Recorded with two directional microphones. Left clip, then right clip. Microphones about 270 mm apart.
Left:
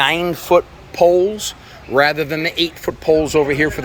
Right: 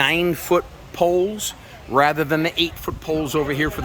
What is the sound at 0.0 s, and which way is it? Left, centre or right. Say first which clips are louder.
A man's voice: left 3 dB; centre.